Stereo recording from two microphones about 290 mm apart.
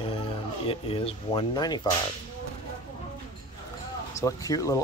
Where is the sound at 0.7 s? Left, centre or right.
Centre.